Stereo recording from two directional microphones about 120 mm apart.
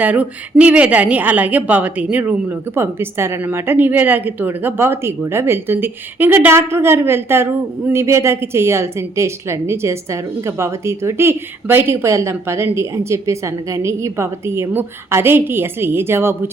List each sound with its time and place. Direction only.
0.0 s a woman's voice: 10° right (ahead or behind)